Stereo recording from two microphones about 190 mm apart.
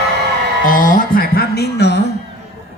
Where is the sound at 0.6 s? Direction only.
45° left (ahead or behind); by 2.0 s 60° left (ahead or behind).